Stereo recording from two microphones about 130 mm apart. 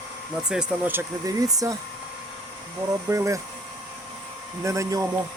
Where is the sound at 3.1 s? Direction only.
25° right (ahead or behind).